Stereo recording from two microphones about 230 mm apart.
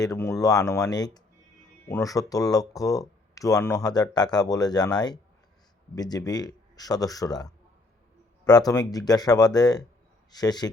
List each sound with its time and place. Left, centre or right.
0.0 s speech: centre